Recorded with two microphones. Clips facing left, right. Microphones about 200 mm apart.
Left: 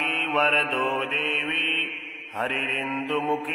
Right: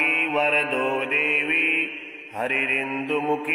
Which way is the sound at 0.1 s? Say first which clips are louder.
Right 1 dB; 10° right (ahead or behind).